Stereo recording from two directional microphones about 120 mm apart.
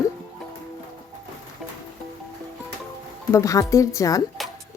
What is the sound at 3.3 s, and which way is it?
Speech, 25° left (ahead or behind).